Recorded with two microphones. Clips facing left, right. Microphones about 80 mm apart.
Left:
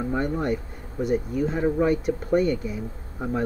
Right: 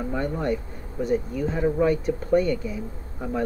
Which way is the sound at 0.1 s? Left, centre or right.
Left.